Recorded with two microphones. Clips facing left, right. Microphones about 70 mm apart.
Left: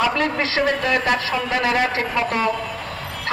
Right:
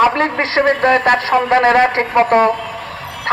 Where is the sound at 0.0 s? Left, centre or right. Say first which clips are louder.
Right 6 dB; right.